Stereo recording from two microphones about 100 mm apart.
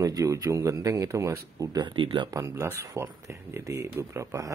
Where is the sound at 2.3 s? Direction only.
35° right (ahead or behind).